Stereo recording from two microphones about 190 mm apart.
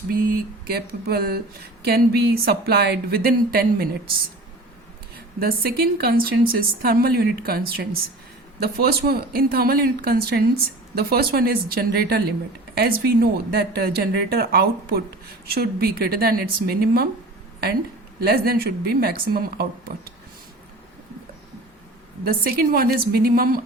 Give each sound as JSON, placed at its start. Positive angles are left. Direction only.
{"t": 0.1, "sound": "a woman's voice", "side_deg": -50}
{"t": 5.1, "sound": "a woman's voice", "side_deg": -50}
{"t": 18.2, "sound": "speech", "side_deg": -50}
{"t": 22.2, "sound": "speech", "side_deg": -50}